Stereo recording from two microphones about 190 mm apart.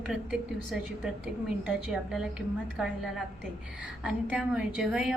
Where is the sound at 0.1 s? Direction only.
5° right (ahead or behind).